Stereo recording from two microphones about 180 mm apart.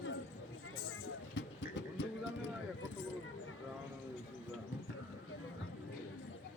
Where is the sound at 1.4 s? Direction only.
85° left.